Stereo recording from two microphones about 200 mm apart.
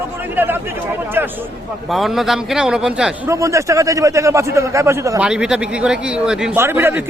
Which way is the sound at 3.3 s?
15° right (ahead or behind).